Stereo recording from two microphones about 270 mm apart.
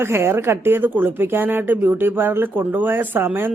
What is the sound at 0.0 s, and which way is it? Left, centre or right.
Speech, centre.